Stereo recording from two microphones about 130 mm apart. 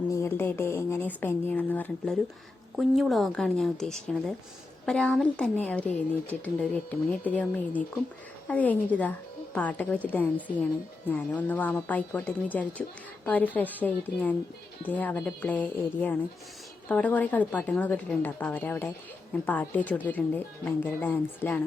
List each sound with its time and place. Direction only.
0.1 s speech: 20° left (ahead or behind)
2.7 s a woman's voice: centre (ahead or behind)